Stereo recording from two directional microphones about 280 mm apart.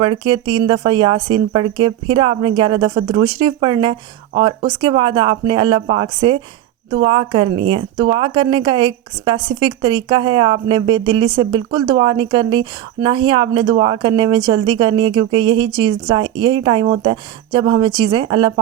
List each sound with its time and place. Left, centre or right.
0.0 s speech: centre